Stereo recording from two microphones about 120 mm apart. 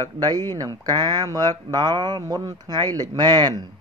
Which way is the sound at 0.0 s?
35° right (ahead or behind).